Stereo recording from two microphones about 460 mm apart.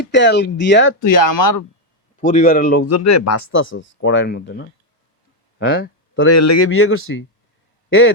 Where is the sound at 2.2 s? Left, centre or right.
Centre.